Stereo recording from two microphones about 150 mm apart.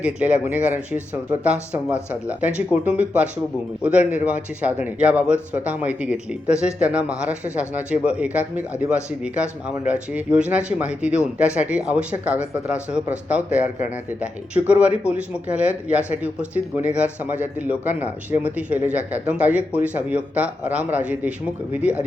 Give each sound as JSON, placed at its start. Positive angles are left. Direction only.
{"t": 0.0, "sound": "speech", "side_deg": -10}
{"t": 2.4, "sound": "speech", "side_deg": -10}